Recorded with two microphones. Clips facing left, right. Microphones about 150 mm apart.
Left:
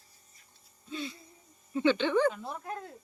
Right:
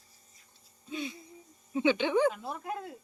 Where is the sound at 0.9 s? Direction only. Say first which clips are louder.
Right 1 dB; 15° right (ahead or behind).